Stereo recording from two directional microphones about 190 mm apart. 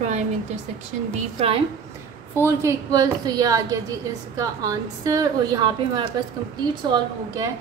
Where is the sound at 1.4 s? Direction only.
30° right (ahead or behind).